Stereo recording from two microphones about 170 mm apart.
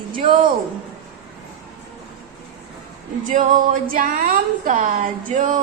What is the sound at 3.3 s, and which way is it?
A woman's voice, 50° right (ahead or behind).